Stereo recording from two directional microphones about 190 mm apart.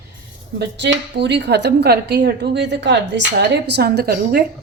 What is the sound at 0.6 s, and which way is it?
A woman's voice, 70° right (ahead or behind).